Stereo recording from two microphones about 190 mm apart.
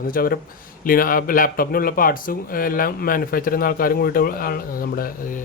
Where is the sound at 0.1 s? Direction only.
50° left (ahead or behind).